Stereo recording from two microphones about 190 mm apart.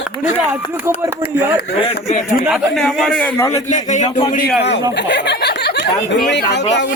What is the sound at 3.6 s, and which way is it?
Speech, 40° left (ahead or behind).